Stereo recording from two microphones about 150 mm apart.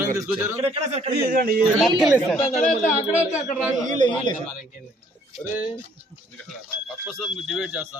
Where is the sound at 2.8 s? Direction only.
55° left (ahead or behind).